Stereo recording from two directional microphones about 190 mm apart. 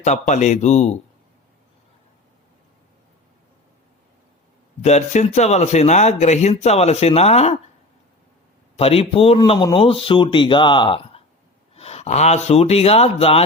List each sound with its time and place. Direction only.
0.0 s speech: 40° left (ahead or behind)
4.8 s speech: 35° left (ahead or behind)
8.7 s speech: 30° left (ahead or behind)